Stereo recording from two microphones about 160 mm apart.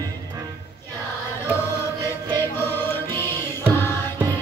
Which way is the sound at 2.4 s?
15° left (ahead or behind).